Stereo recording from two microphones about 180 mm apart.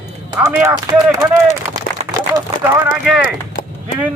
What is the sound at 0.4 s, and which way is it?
Speech, 15° right (ahead or behind).